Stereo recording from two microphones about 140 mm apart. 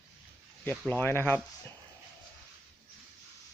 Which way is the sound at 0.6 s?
10° left (ahead or behind).